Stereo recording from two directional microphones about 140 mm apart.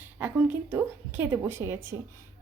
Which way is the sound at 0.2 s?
10° right (ahead or behind).